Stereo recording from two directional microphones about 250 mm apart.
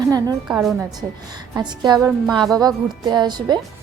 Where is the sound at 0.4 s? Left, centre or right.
Centre.